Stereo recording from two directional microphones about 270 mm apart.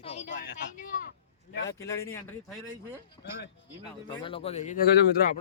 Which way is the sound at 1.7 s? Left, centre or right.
Centre.